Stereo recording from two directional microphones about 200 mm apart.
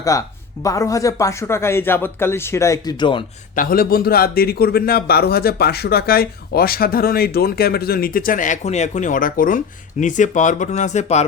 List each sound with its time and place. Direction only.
0.0 s speech: 15° left (ahead or behind)
3.5 s a man's voice: 45° left (ahead or behind)